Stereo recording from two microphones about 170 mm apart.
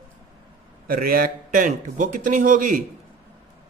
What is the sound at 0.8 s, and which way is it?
A man's voice, 55° right (ahead or behind).